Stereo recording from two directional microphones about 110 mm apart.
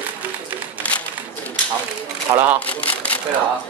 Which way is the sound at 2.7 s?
15° left (ahead or behind).